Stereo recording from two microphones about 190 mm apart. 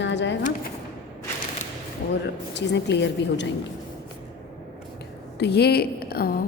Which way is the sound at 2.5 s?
65° left (ahead or behind).